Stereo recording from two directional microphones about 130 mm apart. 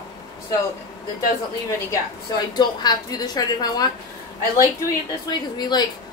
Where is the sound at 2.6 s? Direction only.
35° left (ahead or behind).